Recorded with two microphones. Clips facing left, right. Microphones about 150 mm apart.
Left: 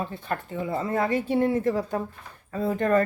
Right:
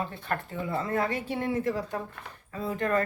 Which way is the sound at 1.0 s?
35° left (ahead or behind).